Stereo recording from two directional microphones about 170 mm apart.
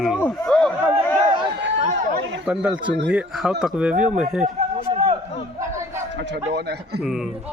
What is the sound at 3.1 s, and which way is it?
Speech, 5° right (ahead or behind).